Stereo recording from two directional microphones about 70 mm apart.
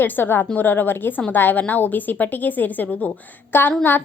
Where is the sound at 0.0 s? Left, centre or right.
Left.